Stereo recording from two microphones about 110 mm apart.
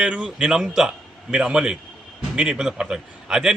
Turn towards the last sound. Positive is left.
turn(degrees=-5)  # may be behind; listen again after turning